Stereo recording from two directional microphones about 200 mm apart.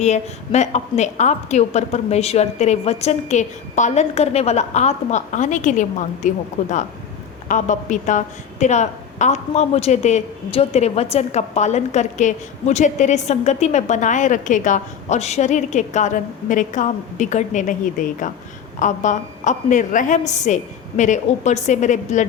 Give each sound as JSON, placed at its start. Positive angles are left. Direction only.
{"t": 0.0, "sound": "a woman's voice", "side_deg": 35}